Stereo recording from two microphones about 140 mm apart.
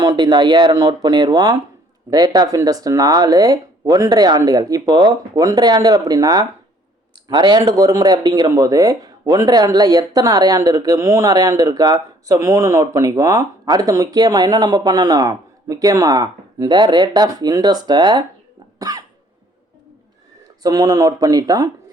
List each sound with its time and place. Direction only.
0.0 s speech: 30° right (ahead or behind)
18.8 s cough: 25° right (ahead or behind)
20.6 s speech: 25° right (ahead or behind)